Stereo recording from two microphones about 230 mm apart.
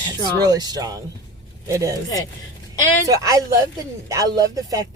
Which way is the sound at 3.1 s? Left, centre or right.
Centre.